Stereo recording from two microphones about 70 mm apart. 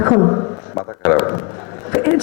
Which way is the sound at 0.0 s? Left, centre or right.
Left.